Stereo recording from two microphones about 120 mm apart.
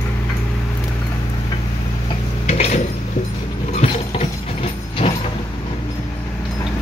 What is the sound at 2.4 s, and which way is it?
Dishes, 70° left (ahead or behind).